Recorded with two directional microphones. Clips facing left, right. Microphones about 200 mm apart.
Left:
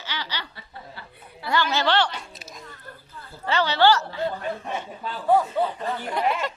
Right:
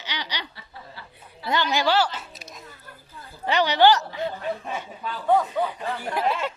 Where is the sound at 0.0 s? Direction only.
20° right (ahead or behind).